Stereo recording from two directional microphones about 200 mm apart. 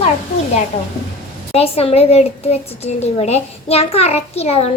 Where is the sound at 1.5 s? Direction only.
30° left (ahead or behind).